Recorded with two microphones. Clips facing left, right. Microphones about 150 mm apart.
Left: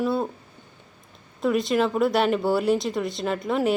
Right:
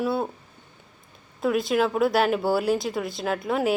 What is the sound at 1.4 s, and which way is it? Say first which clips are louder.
Speech: left 1 dB; centre (ahead or behind).